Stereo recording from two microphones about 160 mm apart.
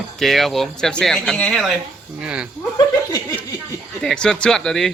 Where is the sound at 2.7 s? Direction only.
25° left (ahead or behind).